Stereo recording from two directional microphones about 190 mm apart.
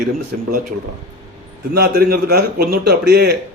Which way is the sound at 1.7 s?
55° right (ahead or behind).